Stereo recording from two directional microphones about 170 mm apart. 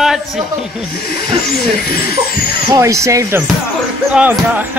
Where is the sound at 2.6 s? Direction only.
20° right (ahead or behind).